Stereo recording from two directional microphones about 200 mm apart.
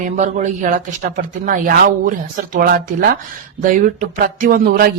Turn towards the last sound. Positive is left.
turn(degrees=-45)  # may be behind; listen again after turning